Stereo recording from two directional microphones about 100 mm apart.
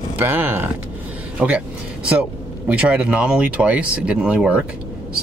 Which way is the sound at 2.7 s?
15° right (ahead or behind).